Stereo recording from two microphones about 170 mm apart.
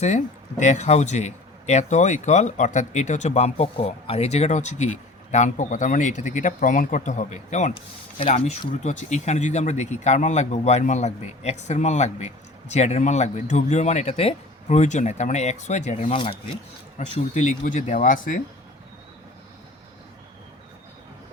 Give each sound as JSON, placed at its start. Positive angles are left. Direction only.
{"t": 0.0, "sound": "speech", "side_deg": 45}
{"t": 8.8, "sound": "speech", "side_deg": 45}